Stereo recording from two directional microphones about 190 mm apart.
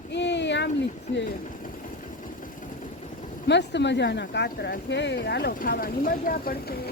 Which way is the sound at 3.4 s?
65° left (ahead or behind).